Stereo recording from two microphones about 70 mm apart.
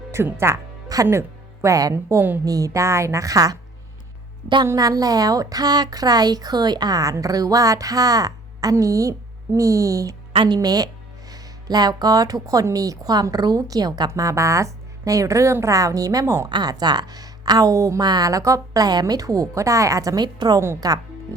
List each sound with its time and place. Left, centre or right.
0.3 s speech: right
0.9 s speech: right
1.6 s a woman's voice: right
2.4 s a woman's voice: right
4.6 s a woman's voice: right
10.5 s speech: right
14.1 s a woman's voice: right
16.5 s speech: right
18.0 s speech: right
20.8 s speech: right